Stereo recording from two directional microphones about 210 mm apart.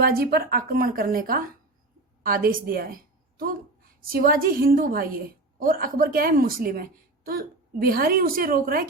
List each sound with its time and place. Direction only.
0.0 s a woman's voice: 45° right (ahead or behind)